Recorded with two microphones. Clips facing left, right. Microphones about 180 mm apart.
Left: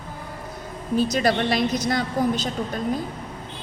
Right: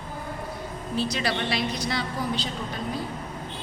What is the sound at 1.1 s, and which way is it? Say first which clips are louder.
A woman's voice: left 6 dB; 45° left (ahead or behind).